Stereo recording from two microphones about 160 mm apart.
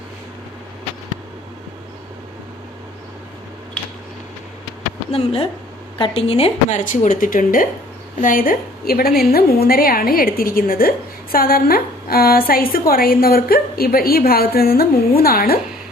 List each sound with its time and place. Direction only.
5.1 s a woman's voice: 40° left (ahead or behind); by 15.5 s 65° left (ahead or behind)